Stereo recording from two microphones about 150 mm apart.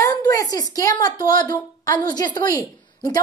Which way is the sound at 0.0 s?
20° left (ahead or behind).